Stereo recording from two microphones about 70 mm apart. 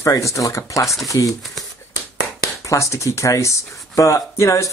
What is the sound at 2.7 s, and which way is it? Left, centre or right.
Speech, left.